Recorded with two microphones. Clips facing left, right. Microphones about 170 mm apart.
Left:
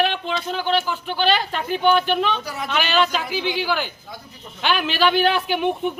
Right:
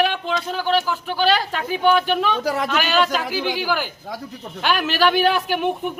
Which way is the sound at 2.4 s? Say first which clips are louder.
Right 8 dB; 90° right.